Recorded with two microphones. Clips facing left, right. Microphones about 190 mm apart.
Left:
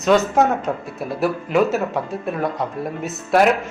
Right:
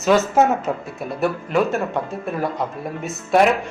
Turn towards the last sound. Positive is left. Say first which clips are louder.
# even
turn(degrees=0)  # may be behind; listen again after turning